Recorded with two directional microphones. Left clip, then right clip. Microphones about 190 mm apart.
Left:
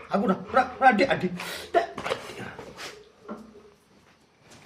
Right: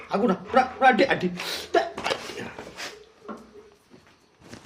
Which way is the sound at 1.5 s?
35° right (ahead or behind).